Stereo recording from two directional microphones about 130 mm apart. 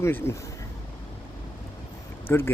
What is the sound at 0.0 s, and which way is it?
Speech, 20° left (ahead or behind).